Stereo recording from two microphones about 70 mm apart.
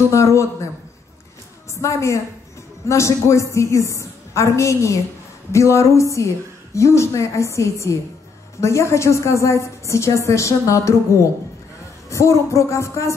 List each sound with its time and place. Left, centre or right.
0.1 s a woman's voice: left
1.8 s a woman's voice: left